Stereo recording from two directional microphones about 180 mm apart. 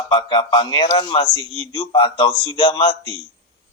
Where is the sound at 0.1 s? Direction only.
25° left (ahead or behind).